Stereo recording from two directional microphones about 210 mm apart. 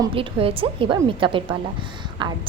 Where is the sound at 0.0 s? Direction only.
25° right (ahead or behind).